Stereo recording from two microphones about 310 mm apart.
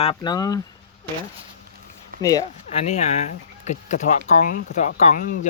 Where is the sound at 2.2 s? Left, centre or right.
Centre.